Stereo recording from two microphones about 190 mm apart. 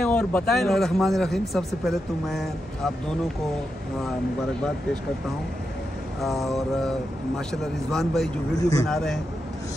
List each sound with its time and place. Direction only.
0.0 s speech: 5° left (ahead or behind)
6.2 s speech: centre (ahead or behind)
8.5 s speech: 15° left (ahead or behind)
8.8 s speech: centre (ahead or behind)